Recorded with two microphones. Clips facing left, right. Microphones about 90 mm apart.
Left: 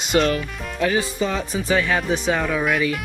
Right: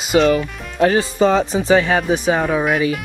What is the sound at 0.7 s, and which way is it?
Speech, 40° right (ahead or behind).